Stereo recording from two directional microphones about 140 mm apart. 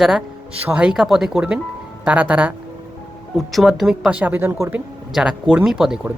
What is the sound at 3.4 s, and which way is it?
Speech, centre (ahead or behind).